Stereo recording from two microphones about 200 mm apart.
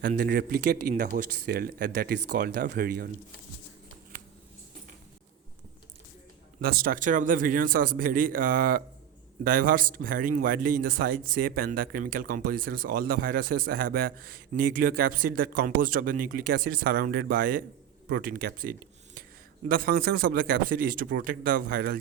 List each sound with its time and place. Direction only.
0.2 s speech: 50° right (ahead or behind)
6.6 s speech: 45° right (ahead or behind)